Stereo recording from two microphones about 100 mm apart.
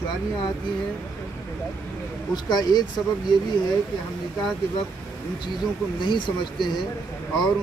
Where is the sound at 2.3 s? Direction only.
45° left (ahead or behind).